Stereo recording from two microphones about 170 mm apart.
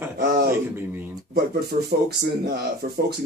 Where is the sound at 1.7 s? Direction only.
55° right (ahead or behind).